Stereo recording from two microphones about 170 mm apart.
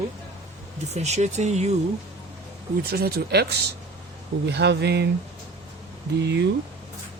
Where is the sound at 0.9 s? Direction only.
40° right (ahead or behind).